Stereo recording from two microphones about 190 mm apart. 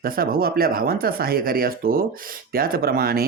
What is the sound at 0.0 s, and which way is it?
Speech, 50° right (ahead or behind).